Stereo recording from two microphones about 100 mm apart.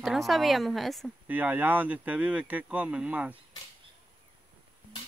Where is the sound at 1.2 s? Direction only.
15° right (ahead or behind).